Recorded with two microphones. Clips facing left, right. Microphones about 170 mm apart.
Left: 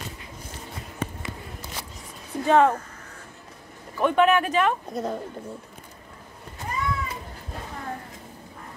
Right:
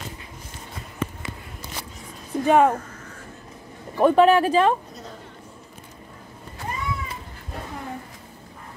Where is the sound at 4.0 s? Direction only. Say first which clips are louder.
Right 4 dB; 35° right (ahead or behind).